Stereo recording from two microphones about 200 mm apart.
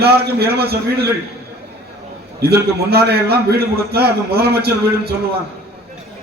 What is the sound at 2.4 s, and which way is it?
A man's voice, 50° right (ahead or behind).